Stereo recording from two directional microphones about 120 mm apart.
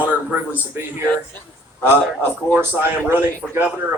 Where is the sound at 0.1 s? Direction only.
10° right (ahead or behind).